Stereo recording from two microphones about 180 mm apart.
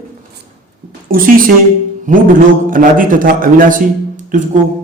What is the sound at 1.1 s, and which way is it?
A man's voice, 50° right (ahead or behind).